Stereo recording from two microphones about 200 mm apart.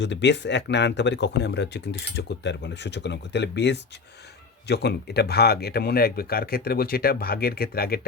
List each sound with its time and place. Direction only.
0.0 s speech: 60° left (ahead or behind)